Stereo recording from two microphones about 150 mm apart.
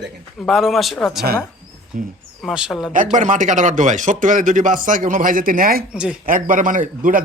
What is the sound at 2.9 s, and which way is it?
Speech, 60° right (ahead or behind).